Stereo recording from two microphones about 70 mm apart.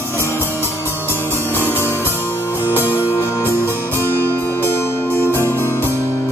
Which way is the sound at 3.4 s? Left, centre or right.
Right.